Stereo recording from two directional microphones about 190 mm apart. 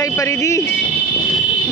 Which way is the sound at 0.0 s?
15° left (ahead or behind).